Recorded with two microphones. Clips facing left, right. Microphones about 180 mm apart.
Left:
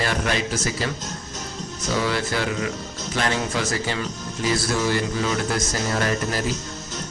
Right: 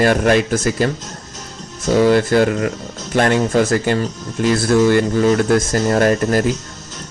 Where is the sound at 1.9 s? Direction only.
45° right (ahead or behind).